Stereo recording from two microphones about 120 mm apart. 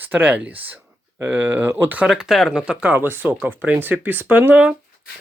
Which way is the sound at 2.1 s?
Centre (ahead or behind).